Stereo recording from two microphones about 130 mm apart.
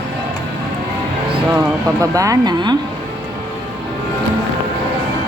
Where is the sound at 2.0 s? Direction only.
25° right (ahead or behind).